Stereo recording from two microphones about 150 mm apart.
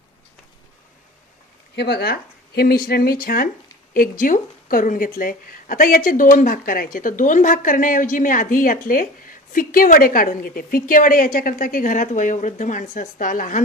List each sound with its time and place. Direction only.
1.7 s a woman's voice: 90° left; by 13.6 s 65° left (ahead or behind)